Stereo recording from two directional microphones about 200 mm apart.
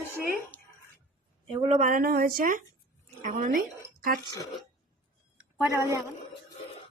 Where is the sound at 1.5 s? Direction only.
30° right (ahead or behind).